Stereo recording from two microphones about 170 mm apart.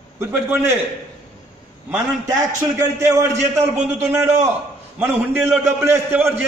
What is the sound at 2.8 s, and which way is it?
A man's voice, 15° right (ahead or behind).